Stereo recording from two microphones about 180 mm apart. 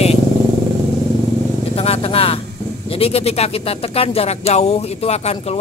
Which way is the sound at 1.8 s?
35° left (ahead or behind).